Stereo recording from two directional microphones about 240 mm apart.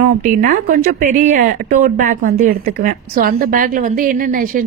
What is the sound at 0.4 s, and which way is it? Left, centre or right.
Speech, right.